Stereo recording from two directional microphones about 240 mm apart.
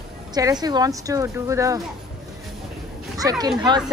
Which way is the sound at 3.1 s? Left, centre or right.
Centre.